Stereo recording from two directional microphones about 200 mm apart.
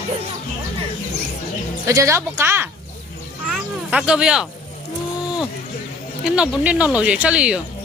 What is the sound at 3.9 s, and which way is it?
Speech, 5° right (ahead or behind).